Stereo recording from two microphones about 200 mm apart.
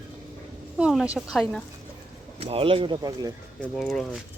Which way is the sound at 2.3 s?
30° right (ahead or behind).